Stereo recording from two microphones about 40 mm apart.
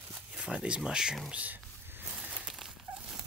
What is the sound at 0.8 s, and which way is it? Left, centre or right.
Speech, centre.